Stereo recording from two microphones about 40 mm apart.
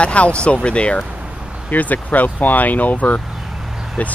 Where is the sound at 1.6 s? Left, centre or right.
Left.